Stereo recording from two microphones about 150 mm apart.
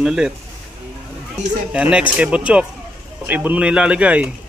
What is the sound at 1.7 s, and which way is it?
A man's voice, 5° right (ahead or behind).